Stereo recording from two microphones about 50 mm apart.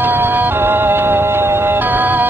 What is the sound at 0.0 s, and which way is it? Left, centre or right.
Music, right.